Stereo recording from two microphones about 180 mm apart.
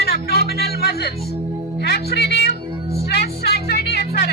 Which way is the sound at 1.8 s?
60° left (ahead or behind).